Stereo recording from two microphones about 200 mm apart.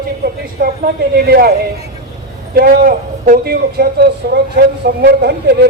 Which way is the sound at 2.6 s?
45° right (ahead or behind).